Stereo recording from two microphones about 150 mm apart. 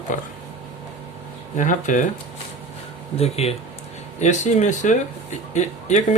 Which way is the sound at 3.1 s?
45° left (ahead or behind).